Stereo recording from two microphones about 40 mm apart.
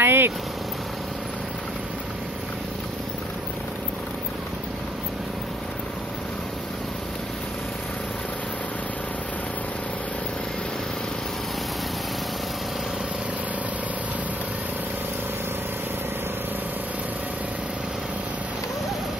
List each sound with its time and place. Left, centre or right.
0.0 s vehicle: right